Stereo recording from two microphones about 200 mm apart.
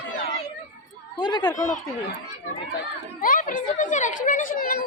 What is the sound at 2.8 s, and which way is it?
Speech, 45° left (ahead or behind).